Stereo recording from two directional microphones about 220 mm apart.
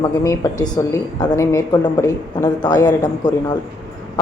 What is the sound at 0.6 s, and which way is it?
A woman's voice, 15° left (ahead or behind).